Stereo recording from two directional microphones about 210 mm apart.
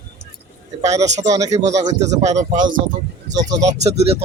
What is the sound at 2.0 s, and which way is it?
Speech, 35° right (ahead or behind).